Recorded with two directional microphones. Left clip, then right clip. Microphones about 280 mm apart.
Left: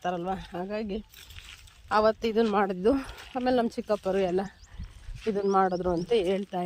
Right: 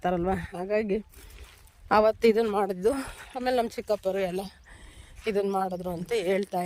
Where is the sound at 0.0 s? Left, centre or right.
Centre.